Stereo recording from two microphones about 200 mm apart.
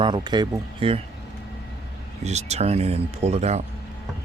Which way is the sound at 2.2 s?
35° right (ahead or behind).